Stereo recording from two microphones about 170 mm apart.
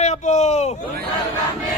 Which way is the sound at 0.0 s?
45° left (ahead or behind).